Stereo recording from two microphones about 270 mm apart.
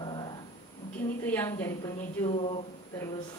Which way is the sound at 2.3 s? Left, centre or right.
Left.